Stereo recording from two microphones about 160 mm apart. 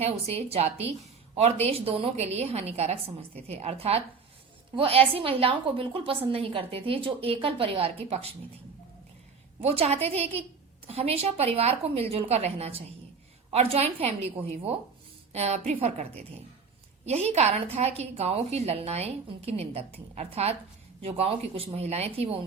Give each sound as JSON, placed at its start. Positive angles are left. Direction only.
{"t": 0.0, "sound": "a woman's voice", "side_deg": -40}
{"t": 9.6, "sound": "a woman's voice", "side_deg": -40}